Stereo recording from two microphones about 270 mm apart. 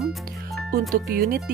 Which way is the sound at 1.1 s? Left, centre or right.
Right.